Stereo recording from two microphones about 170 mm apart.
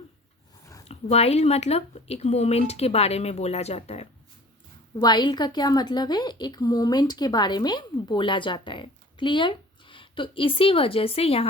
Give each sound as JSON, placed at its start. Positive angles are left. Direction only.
{"t": 0.6, "sound": "a sound", "side_deg": 20}
{"t": 0.9, "sound": "a woman's voice", "side_deg": 40}
{"t": 4.9, "sound": "a woman's voice", "side_deg": 25}